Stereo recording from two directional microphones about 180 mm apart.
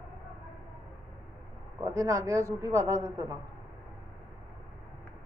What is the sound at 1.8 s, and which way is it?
A man's voice, 20° right (ahead or behind).